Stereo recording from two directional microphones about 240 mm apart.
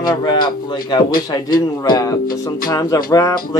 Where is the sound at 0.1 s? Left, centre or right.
Centre.